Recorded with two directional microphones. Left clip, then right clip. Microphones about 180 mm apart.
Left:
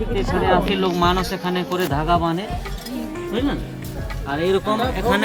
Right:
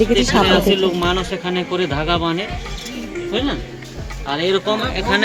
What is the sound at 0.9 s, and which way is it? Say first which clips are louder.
Speech: even; 25° left (ahead or behind).